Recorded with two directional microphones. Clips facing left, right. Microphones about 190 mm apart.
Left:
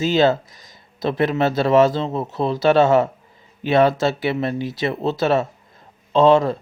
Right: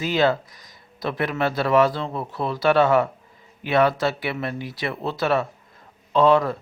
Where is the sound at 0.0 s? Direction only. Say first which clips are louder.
Left 4 dB; 25° left (ahead or behind).